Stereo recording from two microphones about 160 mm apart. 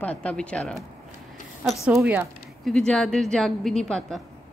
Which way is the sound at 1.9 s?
15° right (ahead or behind).